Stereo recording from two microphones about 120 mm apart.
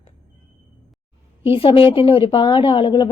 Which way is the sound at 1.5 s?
50° left (ahead or behind).